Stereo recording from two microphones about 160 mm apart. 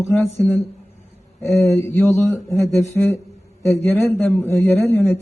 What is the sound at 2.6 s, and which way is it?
Speech, centre (ahead or behind).